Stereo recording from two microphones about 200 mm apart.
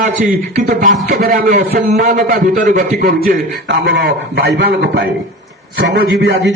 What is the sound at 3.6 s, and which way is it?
A man's voice, 60° right (ahead or behind).